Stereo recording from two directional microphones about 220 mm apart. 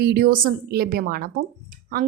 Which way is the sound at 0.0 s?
45° right (ahead or behind).